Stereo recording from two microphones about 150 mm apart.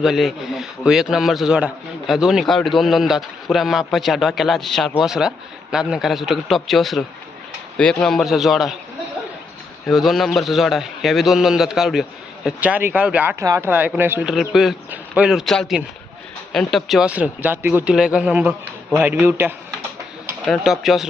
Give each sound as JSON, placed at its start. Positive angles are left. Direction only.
{"t": 0.0, "sound": "a man's voice", "side_deg": 0}
{"t": 9.8, "sound": "a man's voice", "side_deg": 0}
{"t": 13.4, "sound": "speech", "side_deg": -20}
{"t": 13.7, "sound": "a man's voice", "side_deg": -10}
{"t": 20.5, "sound": "a man's voice", "side_deg": 0}